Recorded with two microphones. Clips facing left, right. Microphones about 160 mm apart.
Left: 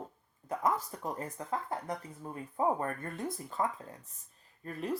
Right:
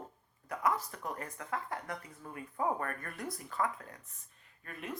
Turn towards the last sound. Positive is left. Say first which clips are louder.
# left 7 dB
turn(degrees=35)  # may be behind; listen again after turning